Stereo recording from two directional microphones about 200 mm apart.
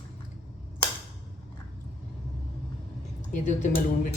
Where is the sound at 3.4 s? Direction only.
40° left (ahead or behind).